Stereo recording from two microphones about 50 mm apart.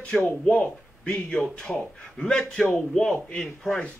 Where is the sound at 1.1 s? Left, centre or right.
Centre.